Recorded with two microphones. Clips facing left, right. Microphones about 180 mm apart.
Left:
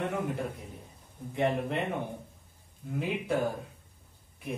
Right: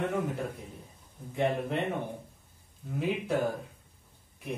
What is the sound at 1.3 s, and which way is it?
Speech, centre (ahead or behind).